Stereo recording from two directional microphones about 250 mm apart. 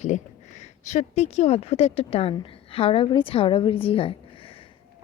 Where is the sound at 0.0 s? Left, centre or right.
Left.